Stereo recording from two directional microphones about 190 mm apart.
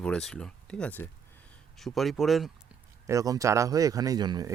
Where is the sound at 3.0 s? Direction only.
20° right (ahead or behind).